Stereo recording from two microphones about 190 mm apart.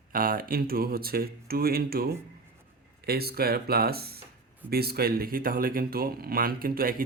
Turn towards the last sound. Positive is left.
turn(degrees=-50)  # may be behind; listen again after turning